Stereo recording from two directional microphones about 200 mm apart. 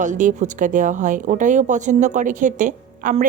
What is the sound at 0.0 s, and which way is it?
Speech, 40° right (ahead or behind).